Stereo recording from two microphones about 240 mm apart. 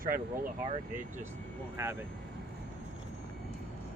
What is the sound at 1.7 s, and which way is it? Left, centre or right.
Speech, centre.